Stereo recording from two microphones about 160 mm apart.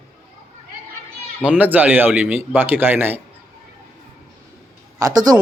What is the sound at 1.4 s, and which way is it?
Speech, 10° right (ahead or behind).